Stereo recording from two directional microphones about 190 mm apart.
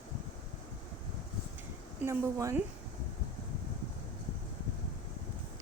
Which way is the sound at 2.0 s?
15° right (ahead or behind).